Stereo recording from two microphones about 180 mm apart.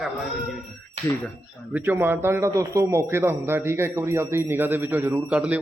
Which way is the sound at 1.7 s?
10° right (ahead or behind).